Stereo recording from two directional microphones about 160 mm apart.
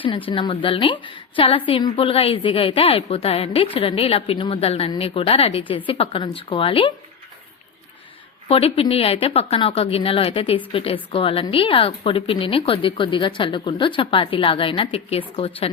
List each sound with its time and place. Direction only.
0.3 s a woman's voice: 30° left (ahead or behind)
8.4 s a woman's voice: 35° left (ahead or behind)